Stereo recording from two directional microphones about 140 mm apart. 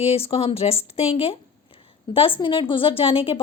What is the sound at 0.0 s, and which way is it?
A woman's voice, 45° left (ahead or behind).